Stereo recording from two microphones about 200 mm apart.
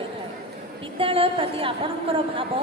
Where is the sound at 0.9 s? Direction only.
25° right (ahead or behind).